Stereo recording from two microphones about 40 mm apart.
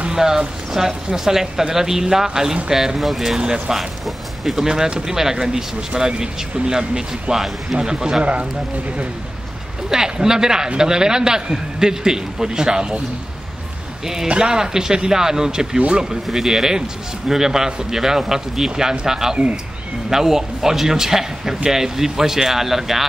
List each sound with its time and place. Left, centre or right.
0.1 s speech: centre
3.3 s speech: centre
3.7 s speech: centre
4.6 s speech: centre
8.2 s speech: right
9.8 s speech: centre
14.2 s speech: right; by 23.0 s centre